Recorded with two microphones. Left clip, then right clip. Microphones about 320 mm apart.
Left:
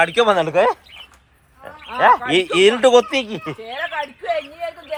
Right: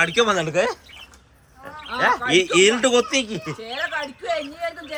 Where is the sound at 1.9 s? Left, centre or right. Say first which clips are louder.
Left 4 dB; centre.